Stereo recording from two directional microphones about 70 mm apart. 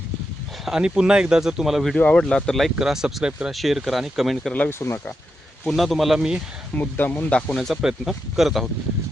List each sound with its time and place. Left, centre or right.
0.6 s speech: centre
2.0 s speech: centre
2.2 s speech: centre
2.7 s speech: centre
4.8 s speech: left
5.6 s speech: centre
6.7 s speech: left
7.3 s speech: centre
7.7 s speech: centre